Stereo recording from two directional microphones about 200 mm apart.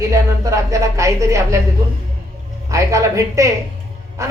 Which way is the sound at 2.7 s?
15° right (ahead or behind).